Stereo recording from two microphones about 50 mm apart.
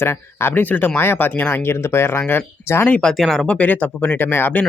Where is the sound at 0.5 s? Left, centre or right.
Left.